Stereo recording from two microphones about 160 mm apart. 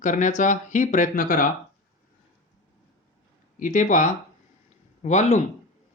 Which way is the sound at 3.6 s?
55° left (ahead or behind).